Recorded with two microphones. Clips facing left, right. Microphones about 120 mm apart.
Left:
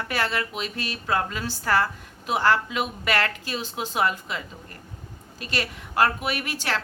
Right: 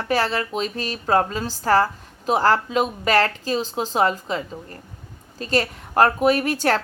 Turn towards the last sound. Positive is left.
turn(degrees=-45)  # may be behind; listen again after turning